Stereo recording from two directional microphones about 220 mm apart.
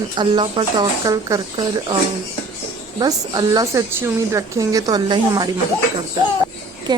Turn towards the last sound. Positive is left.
turn(degrees=-20)  # may be behind; listen again after turning